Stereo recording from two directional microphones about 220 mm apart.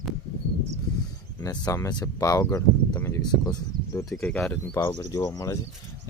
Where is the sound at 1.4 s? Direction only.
15° left (ahead or behind).